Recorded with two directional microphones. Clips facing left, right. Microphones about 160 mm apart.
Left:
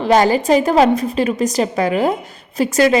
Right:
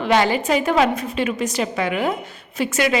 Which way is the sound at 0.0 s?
40° left (ahead or behind).